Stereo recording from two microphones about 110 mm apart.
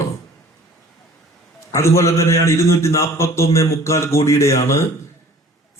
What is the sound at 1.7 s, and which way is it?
A man's voice, 25° left (ahead or behind).